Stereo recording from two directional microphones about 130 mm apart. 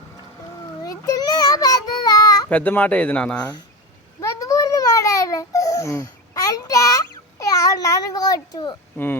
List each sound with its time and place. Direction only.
0.9 s child singing: 30° left (ahead or behind)
2.5 s speech: 10° left (ahead or behind)
4.2 s babbling: 25° left (ahead or behind)